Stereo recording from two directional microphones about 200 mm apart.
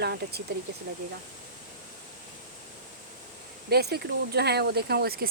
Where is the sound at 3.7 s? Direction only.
55° right (ahead or behind).